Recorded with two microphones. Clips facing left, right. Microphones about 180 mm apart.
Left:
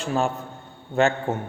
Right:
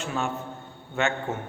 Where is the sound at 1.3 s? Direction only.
35° left (ahead or behind).